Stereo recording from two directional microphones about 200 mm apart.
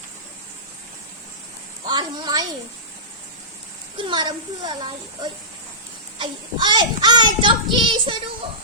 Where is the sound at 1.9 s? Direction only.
20° right (ahead or behind).